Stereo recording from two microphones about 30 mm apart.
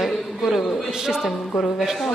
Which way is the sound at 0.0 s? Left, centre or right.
Centre.